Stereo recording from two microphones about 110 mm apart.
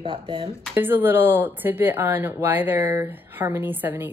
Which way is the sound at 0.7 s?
20° right (ahead or behind).